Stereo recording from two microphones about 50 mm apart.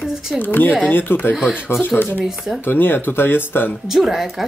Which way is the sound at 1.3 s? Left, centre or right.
Centre.